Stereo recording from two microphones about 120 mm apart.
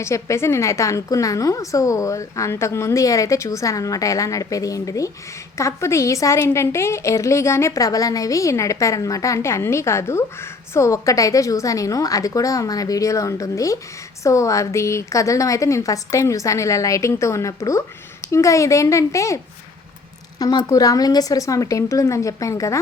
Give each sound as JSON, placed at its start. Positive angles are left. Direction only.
{"t": 0.0, "sound": "a woman's voice", "side_deg": 25}
{"t": 20.4, "sound": "a woman's voice", "side_deg": 35}